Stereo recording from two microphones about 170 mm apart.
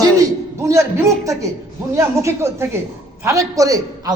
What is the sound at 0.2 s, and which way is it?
A man's voice, 15° right (ahead or behind).